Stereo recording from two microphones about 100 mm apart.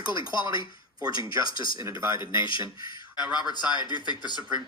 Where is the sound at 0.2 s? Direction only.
55° left (ahead or behind).